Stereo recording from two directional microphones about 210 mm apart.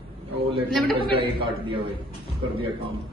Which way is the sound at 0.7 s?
Centre (ahead or behind).